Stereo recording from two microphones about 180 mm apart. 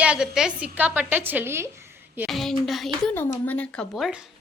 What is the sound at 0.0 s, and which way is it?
Speech, 5° right (ahead or behind).